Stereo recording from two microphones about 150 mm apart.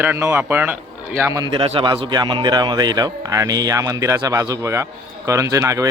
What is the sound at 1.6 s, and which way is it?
Speech, 35° right (ahead or behind).